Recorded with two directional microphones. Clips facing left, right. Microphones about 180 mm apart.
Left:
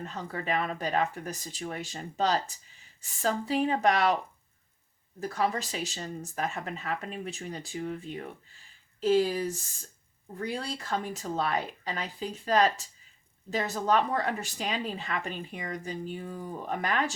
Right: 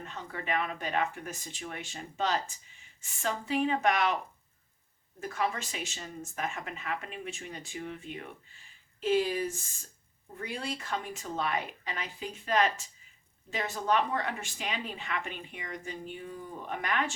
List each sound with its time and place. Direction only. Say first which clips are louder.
0.0 s speech: left 4 dB; 40° left (ahead or behind)
5.2 s speech: left 3 dB; 35° left (ahead or behind)